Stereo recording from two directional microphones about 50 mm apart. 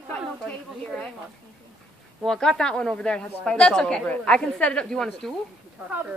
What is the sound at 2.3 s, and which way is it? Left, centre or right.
A woman's voice, centre.